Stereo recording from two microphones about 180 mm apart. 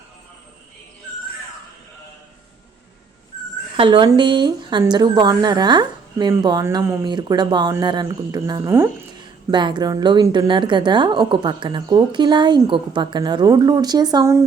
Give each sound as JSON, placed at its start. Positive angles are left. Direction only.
{"t": 3.8, "sound": "speech", "side_deg": -25}